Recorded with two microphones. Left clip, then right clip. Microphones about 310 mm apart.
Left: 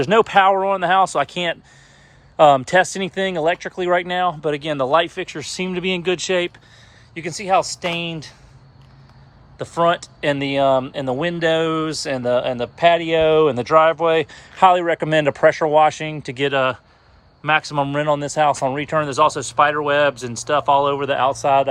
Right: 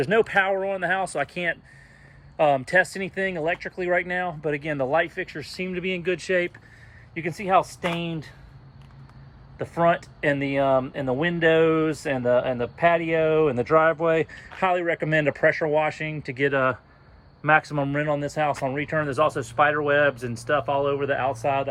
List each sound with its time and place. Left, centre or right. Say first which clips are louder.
0.1 s speech: left 9 dB; centre
9.6 s speech: left 4 dB; centre